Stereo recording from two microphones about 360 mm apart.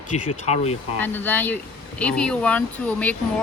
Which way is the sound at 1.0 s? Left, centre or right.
Centre.